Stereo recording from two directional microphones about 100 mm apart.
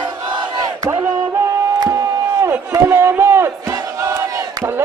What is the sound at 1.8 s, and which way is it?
Chop, 35° right (ahead or behind).